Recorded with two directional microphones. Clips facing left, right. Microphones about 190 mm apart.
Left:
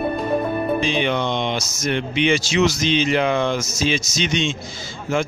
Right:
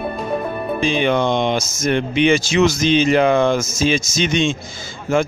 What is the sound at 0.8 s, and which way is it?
A man's voice, 50° right (ahead or behind).